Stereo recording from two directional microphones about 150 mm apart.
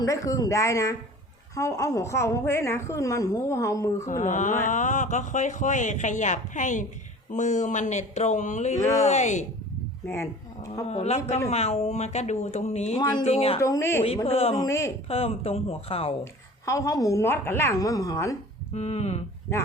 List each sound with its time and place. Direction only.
0.0 s a woman's voice: 25° left (ahead or behind)
4.1 s speech: 55° left (ahead or behind)
10.1 s speech: 20° left (ahead or behind)
10.8 s speech: 45° left (ahead or behind)
13.6 s a woman's voice: 20° left (ahead or behind)
14.3 s speech: 40° left (ahead or behind)
14.6 s a woman's voice: 20° left (ahead or behind)
15.0 s speech: 40° left (ahead or behind)
16.2 s a woman's voice: 20° left (ahead or behind)
18.7 s speech: 45° left (ahead or behind)